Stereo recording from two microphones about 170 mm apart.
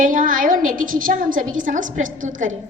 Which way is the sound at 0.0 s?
50° right (ahead or behind).